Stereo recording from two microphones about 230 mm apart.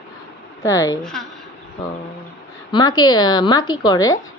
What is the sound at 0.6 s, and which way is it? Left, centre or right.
Speech, centre.